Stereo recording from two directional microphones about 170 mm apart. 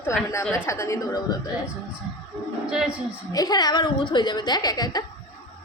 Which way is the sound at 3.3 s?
20° left (ahead or behind).